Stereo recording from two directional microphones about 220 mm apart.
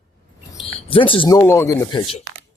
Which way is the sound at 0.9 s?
25° left (ahead or behind).